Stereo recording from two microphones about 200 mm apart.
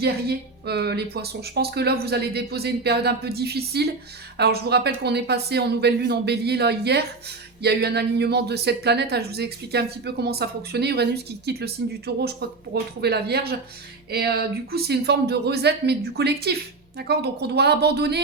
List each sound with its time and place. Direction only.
0.0 s a woman's voice: 55° right (ahead or behind)